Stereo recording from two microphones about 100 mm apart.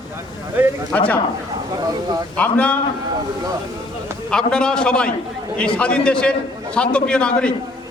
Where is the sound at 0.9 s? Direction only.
15° left (ahead or behind).